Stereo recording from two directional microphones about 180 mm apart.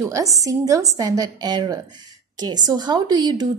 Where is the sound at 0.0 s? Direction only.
20° right (ahead or behind).